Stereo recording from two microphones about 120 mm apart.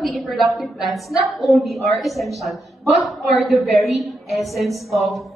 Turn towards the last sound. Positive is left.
turn(degrees=0)  # may be behind; listen again after turning